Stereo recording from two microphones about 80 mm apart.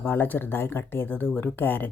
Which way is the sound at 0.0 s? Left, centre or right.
Left.